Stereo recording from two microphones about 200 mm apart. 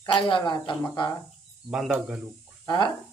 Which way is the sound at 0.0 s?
25° left (ahead or behind).